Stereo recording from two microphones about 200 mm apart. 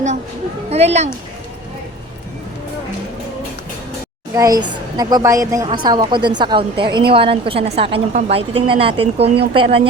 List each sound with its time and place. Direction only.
0.7 s speech: 30° right (ahead or behind)
4.4 s a woman's voice: 20° right (ahead or behind)